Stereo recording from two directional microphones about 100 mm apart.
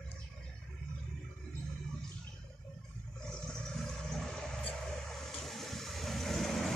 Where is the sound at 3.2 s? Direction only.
5° left (ahead or behind).